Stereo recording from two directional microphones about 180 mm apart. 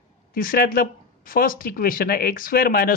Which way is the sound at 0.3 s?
50° left (ahead or behind).